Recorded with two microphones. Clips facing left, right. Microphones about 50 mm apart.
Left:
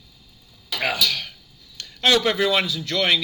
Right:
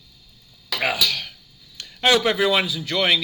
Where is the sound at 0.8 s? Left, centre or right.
Centre.